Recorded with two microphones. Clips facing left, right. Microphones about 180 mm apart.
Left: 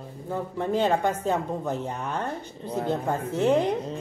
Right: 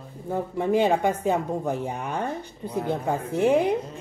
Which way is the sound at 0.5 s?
10° right (ahead or behind).